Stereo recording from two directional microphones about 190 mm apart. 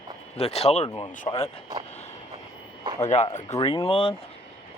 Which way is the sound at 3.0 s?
35° left (ahead or behind).